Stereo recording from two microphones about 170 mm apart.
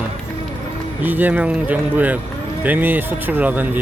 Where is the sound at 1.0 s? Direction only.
10° right (ahead or behind).